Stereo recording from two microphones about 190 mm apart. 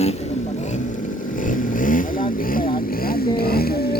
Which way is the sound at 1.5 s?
45° left (ahead or behind).